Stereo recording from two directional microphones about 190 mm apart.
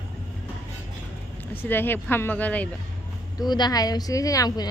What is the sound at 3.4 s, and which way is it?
Speech, 20° left (ahead or behind).